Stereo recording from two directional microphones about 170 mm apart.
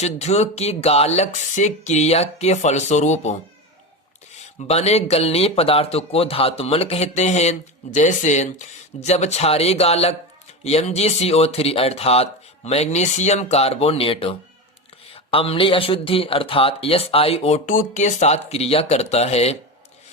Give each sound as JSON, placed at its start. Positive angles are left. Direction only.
{"t": 0.0, "sound": "speech", "side_deg": 40}
{"t": 4.7, "sound": "speech", "side_deg": 40}
{"t": 17.7, "sound": "speech", "side_deg": 50}